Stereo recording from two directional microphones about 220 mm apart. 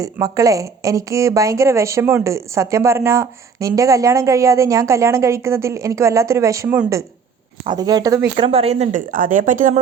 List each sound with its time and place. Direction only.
0.0 s speech: 15° right (ahead or behind)
8.4 s speech: 25° right (ahead or behind)